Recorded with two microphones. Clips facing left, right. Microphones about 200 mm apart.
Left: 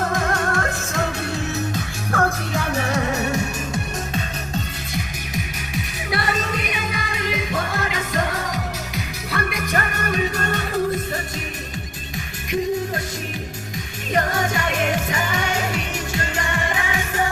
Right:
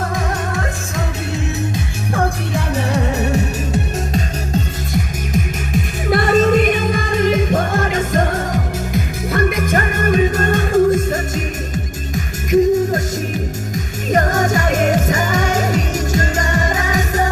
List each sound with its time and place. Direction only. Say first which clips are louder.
0.1 s music: even; 5° right (ahead or behind)
1.7 s music: right 3 dB; 15° right (ahead or behind)
2.7 s music: right 4 dB; 35° right (ahead or behind)
14.1 s music: right 6 dB; 45° right (ahead or behind)